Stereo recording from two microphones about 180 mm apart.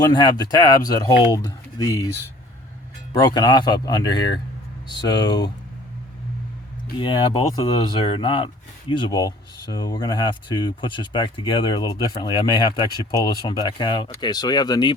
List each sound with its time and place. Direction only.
0.1 s speech: 20° left (ahead or behind)
3.1 s speech: 20° left (ahead or behind)
7.0 s speech: 30° left (ahead or behind)